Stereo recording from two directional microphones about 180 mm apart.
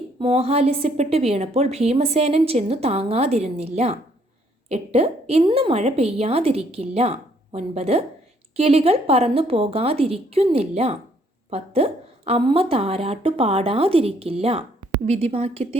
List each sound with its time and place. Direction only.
0.2 s a woman's voice: 35° right (ahead or behind)